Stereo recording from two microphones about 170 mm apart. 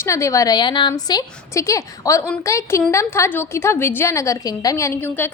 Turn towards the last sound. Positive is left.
turn(degrees=10)  # may be behind; listen again after turning